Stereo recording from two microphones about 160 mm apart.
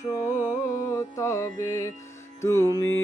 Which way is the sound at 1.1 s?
20° left (ahead or behind).